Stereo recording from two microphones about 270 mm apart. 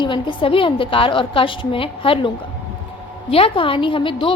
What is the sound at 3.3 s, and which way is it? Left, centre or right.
A woman's voice, centre.